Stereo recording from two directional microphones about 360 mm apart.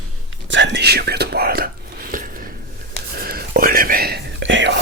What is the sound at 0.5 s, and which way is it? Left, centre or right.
Whispering, right.